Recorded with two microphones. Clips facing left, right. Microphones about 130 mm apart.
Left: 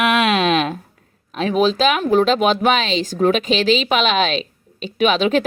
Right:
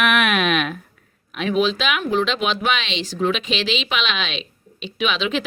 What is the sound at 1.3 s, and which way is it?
Speech, 35° left (ahead or behind).